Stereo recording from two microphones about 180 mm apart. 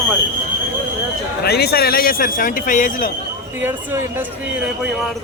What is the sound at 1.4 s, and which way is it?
Speech, 65° left (ahead or behind).